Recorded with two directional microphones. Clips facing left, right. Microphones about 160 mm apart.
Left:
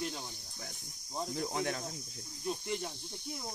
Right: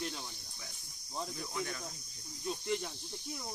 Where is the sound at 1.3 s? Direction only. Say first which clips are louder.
Left 5 dB; 65° left (ahead or behind).